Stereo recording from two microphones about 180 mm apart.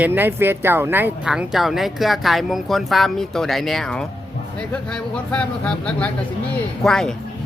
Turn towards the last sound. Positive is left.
turn(degrees=0)  # may be behind; listen again after turning